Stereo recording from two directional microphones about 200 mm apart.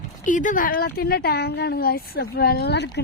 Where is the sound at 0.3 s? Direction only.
40° left (ahead or behind).